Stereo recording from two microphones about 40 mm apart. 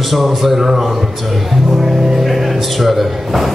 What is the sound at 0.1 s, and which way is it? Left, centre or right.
A man's voice, centre.